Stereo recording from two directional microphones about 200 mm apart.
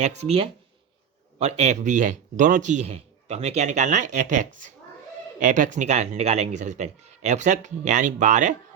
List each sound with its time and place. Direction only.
0.0 s speech: 30° right (ahead or behind)